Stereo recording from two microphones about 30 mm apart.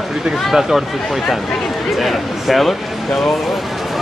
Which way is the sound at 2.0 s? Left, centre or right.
Centre.